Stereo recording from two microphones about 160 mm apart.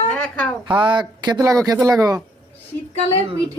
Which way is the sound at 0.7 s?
30° right (ahead or behind).